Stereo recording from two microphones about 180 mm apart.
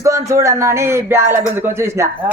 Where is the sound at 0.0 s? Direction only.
15° right (ahead or behind).